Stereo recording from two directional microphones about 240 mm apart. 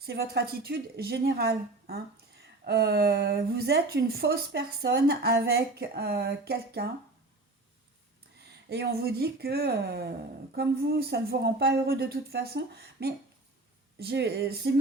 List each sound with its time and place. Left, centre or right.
0.0 s a woman's voice: right
8.7 s a woman's voice: right